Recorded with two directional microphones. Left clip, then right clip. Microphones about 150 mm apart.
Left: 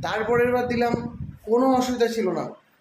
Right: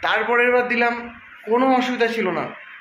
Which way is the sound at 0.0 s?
20° left (ahead or behind).